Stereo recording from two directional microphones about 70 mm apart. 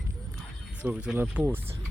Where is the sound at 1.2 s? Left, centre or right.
Right.